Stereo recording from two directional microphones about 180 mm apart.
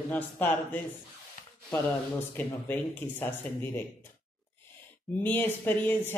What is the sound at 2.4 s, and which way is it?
Speech, 10° left (ahead or behind).